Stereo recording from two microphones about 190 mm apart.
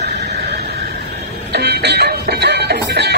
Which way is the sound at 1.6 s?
60° right (ahead or behind).